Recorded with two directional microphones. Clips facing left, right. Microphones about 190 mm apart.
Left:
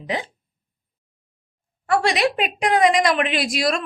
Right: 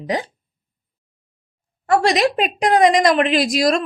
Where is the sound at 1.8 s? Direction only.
40° right (ahead or behind).